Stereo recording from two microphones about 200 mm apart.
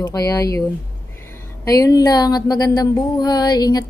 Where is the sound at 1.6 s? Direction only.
20° left (ahead or behind).